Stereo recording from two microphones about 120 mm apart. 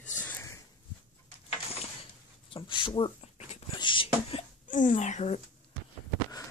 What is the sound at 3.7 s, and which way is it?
Beatboxing, 45° left (ahead or behind).